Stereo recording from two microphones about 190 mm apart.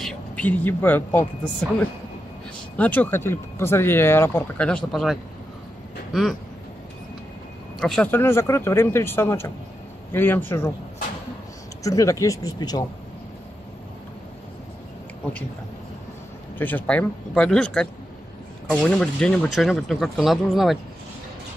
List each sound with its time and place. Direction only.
0.0 s speech: 10° left (ahead or behind)
2.8 s speech: 10° left (ahead or behind)
7.8 s speech: 5° left (ahead or behind)
11.8 s speech: 15° left (ahead or behind)
16.5 s speech: 10° left (ahead or behind)